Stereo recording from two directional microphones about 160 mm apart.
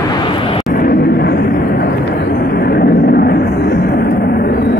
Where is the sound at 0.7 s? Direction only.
70° left (ahead or behind).